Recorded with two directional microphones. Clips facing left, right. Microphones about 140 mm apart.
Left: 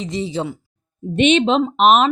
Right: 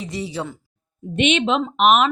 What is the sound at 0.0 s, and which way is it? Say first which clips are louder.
Speech: left 4 dB; 20° left (ahead or behind).